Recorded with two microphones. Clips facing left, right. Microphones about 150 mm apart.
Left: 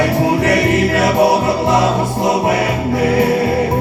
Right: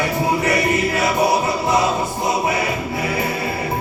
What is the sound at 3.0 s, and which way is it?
Music, 75° left (ahead or behind).